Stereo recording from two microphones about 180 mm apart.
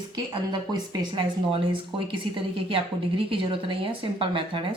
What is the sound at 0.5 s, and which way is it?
A woman's voice, 25° right (ahead or behind).